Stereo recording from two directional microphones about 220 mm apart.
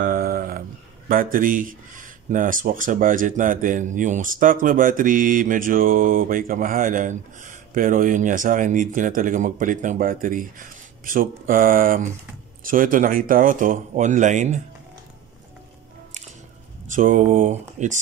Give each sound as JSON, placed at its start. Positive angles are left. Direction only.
{"t": 0.0, "sound": "speech", "side_deg": -40}
{"t": 16.9, "sound": "speech", "side_deg": -35}